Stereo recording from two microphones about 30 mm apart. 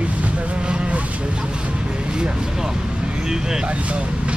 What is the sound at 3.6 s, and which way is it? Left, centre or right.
Speech, right.